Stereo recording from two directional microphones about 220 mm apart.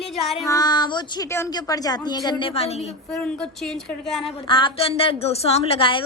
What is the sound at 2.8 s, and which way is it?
A woman's voice, centre (ahead or behind).